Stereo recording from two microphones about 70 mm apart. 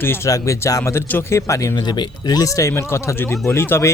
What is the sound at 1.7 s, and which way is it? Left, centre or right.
Speech, left.